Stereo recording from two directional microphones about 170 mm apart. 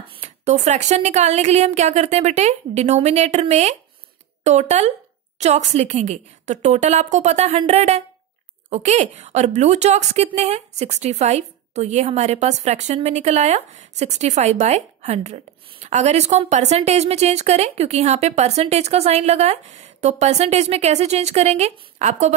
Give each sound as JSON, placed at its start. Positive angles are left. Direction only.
{"t": 0.1, "sound": "a woman's voice", "side_deg": -40}